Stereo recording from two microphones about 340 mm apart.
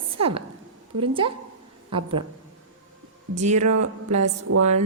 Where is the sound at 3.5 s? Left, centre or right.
Right.